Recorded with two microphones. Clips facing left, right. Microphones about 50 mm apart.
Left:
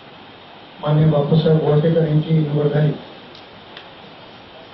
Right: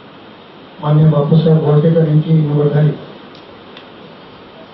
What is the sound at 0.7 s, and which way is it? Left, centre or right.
Speech, centre.